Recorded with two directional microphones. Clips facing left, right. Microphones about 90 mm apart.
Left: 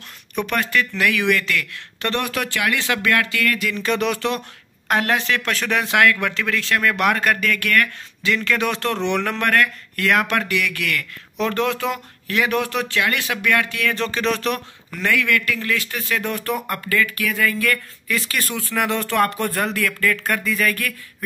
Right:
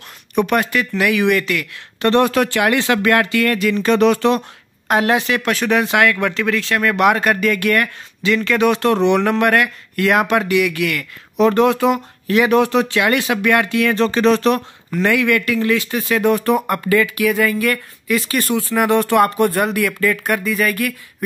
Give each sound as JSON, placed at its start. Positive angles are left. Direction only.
{"t": 0.4, "sound": "speech", "side_deg": -15}
{"t": 2.0, "sound": "speech", "side_deg": -30}
{"t": 4.8, "sound": "speech", "side_deg": -15}
{"t": 8.2, "sound": "speech", "side_deg": -5}